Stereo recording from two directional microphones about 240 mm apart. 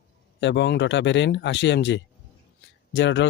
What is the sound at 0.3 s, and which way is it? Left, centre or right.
Speech, left.